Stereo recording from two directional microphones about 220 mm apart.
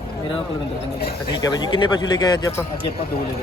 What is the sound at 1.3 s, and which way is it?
A man's voice, 20° left (ahead or behind).